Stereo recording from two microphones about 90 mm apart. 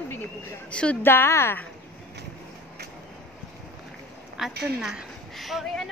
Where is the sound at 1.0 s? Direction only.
25° left (ahead or behind).